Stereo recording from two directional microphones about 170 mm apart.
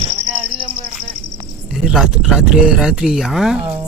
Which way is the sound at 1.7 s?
5° right (ahead or behind).